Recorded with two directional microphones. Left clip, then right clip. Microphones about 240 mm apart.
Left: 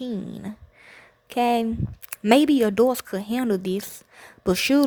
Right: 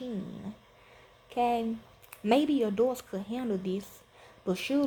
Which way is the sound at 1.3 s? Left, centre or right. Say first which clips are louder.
Left 7 dB; left.